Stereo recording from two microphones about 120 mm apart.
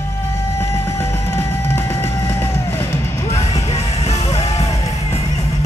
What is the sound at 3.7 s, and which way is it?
Music, 65° left (ahead or behind).